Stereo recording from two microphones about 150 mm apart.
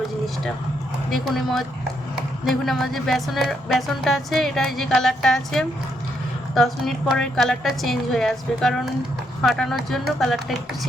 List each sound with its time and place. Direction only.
1.1 s speech: centre (ahead or behind)